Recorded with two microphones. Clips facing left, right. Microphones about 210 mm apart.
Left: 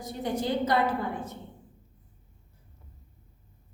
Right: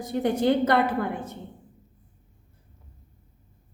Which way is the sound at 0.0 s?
65° right (ahead or behind).